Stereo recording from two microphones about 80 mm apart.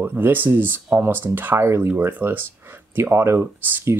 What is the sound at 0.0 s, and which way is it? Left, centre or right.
Speech, right.